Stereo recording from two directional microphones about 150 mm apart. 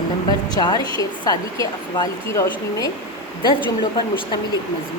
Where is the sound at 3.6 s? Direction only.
30° left (ahead or behind).